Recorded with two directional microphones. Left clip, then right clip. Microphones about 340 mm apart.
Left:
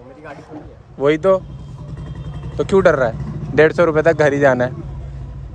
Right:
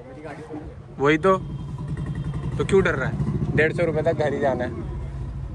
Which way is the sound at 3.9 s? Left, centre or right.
Left.